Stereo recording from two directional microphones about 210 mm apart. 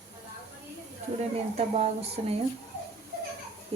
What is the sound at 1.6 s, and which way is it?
Speech, 30° right (ahead or behind).